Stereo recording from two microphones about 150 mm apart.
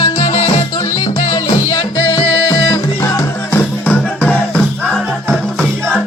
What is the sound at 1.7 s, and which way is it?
Music, 30° left (ahead or behind).